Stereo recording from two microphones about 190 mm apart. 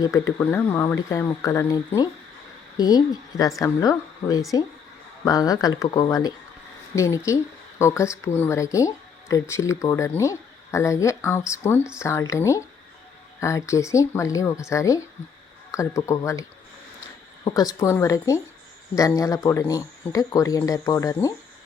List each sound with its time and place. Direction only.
0.3 s a woman's voice: 10° left (ahead or behind)